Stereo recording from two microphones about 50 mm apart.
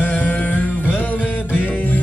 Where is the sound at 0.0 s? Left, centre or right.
Left.